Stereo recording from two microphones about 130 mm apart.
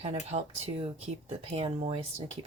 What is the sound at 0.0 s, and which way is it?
Speech, 55° right (ahead or behind).